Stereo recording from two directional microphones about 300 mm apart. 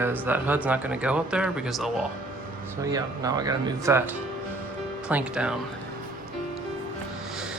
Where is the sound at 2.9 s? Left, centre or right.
Centre.